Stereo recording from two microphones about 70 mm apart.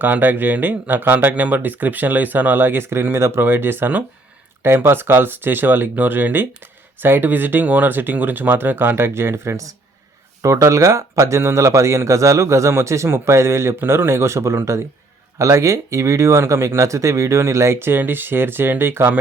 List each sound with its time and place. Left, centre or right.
0.0 s speech: right